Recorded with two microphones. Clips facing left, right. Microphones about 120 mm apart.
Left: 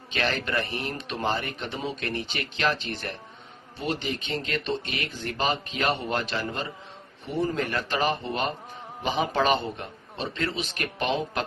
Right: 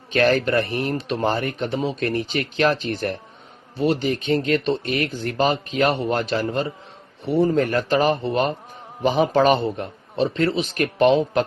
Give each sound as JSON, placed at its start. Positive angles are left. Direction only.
{"t": 0.1, "sound": "speech", "side_deg": -40}